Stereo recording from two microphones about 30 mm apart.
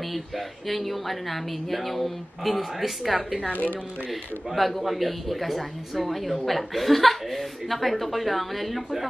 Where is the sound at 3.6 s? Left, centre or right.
Left.